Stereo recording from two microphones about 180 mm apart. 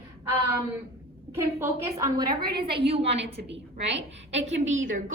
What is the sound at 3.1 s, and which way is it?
Speech, 75° right (ahead or behind).